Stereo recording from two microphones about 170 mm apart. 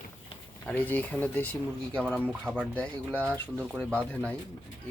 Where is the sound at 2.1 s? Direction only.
10° right (ahead or behind); by 4.4 s 10° left (ahead or behind).